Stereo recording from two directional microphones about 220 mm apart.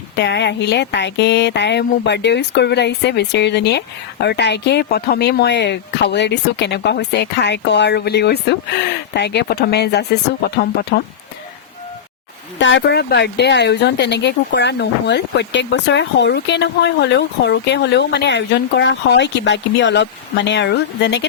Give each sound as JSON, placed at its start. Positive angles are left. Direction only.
{"t": 0.2, "sound": "speech", "side_deg": 50}
{"t": 12.5, "sound": "speech", "side_deg": 55}